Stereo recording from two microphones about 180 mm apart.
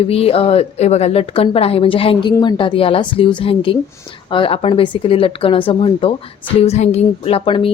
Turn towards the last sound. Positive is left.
turn(degrees=30)  # may be behind; listen again after turning